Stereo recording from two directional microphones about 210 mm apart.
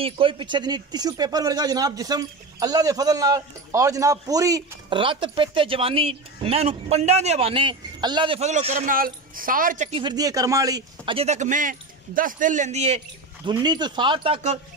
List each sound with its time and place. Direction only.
0.0 s a woman's voice: 25° right (ahead or behind)
13.5 s speech: 20° right (ahead or behind)